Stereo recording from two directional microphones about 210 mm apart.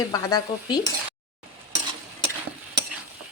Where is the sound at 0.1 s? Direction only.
20° left (ahead or behind).